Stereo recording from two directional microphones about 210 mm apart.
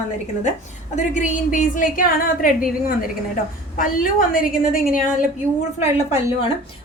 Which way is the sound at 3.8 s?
40° left (ahead or behind).